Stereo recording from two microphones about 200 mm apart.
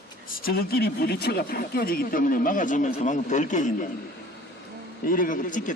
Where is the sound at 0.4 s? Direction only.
50° left (ahead or behind).